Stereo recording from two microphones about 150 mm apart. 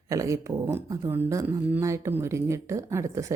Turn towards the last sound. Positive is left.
turn(degrees=-20)  # may be behind; listen again after turning